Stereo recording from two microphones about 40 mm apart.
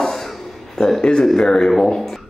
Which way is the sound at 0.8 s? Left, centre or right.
Centre.